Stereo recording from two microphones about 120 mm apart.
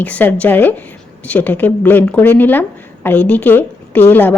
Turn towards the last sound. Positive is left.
turn(degrees=15)  # may be behind; listen again after turning